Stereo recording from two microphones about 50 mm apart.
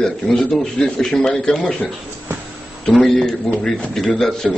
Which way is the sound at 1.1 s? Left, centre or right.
Centre.